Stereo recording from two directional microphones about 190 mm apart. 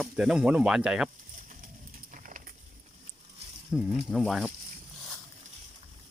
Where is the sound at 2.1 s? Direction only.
45° right (ahead or behind).